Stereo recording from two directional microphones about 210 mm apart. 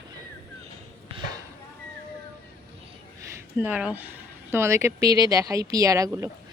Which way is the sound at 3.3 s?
5° right (ahead or behind).